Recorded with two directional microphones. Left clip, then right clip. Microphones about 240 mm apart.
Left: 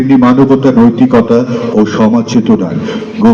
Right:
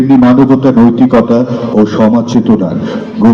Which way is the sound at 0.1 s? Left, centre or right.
Right.